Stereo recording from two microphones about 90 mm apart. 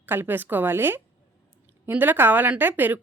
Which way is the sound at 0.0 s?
20° right (ahead or behind).